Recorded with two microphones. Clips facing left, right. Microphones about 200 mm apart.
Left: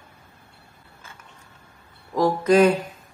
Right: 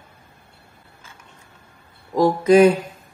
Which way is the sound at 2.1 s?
15° right (ahead or behind).